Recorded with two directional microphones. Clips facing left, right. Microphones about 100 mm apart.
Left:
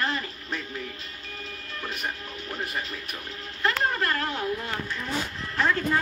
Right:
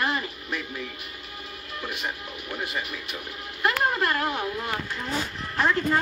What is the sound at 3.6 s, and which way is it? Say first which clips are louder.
Speech: right 2 dB; 20° right (ahead or behind).